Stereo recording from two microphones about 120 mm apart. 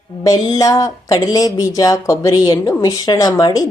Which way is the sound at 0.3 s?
30° left (ahead or behind).